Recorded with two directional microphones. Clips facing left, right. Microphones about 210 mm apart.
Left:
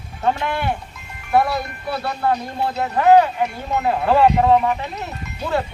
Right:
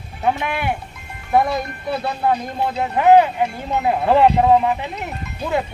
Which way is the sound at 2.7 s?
15° right (ahead or behind).